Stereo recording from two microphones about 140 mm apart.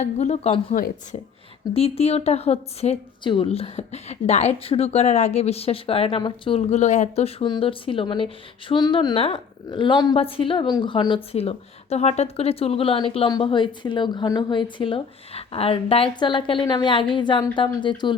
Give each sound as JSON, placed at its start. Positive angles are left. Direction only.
{"t": 0.0, "sound": "speech", "side_deg": 55}
{"t": 0.7, "sound": "a woman's voice", "side_deg": 70}
{"t": 1.7, "sound": "a woman's voice", "side_deg": 45}
{"t": 7.4, "sound": "a woman's voice", "side_deg": 35}